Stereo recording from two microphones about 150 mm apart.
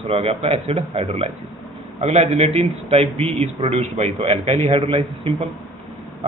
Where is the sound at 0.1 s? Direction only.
40° right (ahead or behind).